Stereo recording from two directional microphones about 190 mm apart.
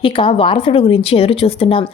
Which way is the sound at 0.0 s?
25° left (ahead or behind).